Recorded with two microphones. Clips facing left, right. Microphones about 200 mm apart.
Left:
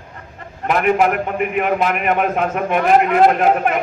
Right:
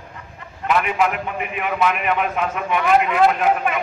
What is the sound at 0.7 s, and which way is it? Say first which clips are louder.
A man's voice: left 4 dB; 45° left (ahead or behind).